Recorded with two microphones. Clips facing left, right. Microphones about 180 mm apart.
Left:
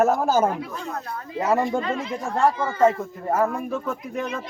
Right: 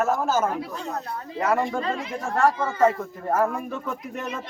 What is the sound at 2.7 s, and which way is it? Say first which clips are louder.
Speech: left 2 dB; 10° left (ahead or behind).